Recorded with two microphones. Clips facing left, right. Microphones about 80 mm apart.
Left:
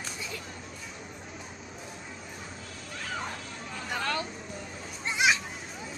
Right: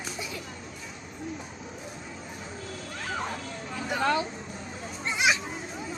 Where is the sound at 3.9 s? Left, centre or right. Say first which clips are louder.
Right 6 dB; centre.